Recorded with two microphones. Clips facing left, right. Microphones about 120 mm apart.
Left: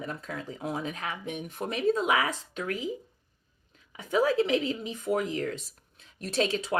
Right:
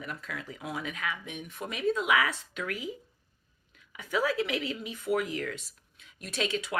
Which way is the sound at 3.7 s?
30° left (ahead or behind).